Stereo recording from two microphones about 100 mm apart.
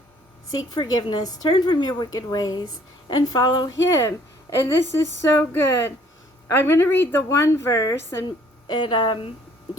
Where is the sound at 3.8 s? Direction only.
25° left (ahead or behind).